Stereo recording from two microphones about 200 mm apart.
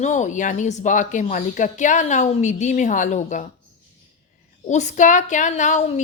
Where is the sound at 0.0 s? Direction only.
35° left (ahead or behind).